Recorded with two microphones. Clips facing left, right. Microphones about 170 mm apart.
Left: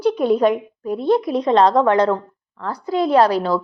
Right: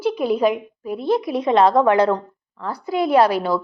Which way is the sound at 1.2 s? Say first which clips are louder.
Left 2 dB; 40° left (ahead or behind).